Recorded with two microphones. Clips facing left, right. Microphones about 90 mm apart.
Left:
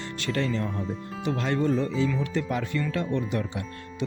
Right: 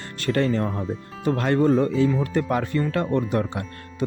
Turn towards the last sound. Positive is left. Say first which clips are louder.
# right 3 dB
turn(degrees=-45)  # may be behind; listen again after turning